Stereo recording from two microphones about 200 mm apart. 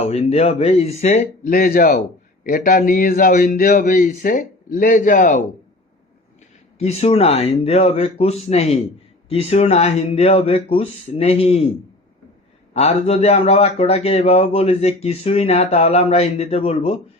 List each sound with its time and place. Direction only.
0.0 s a man's voice: 30° left (ahead or behind)
6.7 s a man's voice: 30° left (ahead or behind)
12.7 s a man's voice: 35° left (ahead or behind)